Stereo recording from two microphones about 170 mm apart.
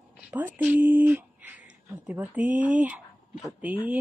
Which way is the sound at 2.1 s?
10° right (ahead or behind).